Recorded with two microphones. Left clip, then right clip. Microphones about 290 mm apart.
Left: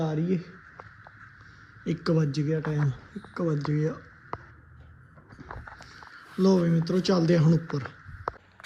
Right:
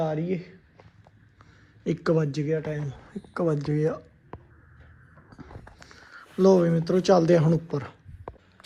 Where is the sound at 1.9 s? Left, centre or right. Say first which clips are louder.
Right 3 dB; centre.